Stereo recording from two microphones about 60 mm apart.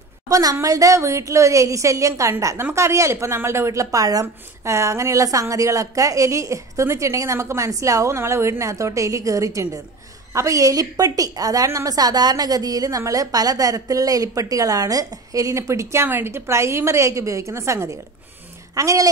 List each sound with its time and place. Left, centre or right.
0.3 s a woman's voice: right
8.2 s a woman's voice: right
16.1 s a woman's voice: right
18.8 s speech: right